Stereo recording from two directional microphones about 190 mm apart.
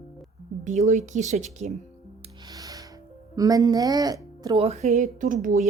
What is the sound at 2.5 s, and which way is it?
Music, 20° right (ahead or behind).